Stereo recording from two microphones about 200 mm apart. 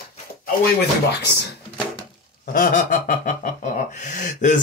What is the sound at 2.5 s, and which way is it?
Snicker, 45° left (ahead or behind).